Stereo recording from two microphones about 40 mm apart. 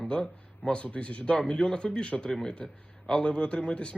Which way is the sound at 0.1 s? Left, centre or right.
Left.